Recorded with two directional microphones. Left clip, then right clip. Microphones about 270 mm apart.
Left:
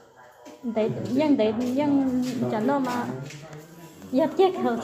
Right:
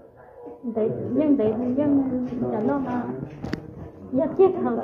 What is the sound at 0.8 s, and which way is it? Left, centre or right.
A woman's voice, left.